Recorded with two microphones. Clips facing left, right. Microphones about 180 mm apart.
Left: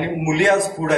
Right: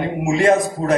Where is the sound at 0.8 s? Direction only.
40° right (ahead or behind).